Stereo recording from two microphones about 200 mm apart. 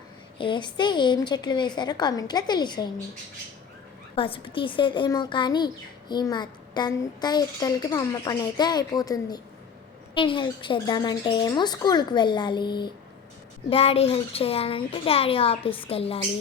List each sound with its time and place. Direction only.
0.3 s a woman's voice: 25° left (ahead or behind)
4.1 s a woman's voice: 25° left (ahead or behind)